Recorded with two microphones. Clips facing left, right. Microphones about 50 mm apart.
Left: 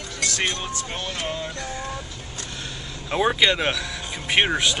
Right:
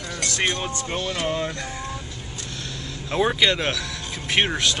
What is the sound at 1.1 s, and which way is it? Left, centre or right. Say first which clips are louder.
Music: right 4 dB; centre.